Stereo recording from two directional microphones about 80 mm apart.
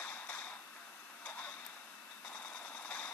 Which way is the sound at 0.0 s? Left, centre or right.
Centre.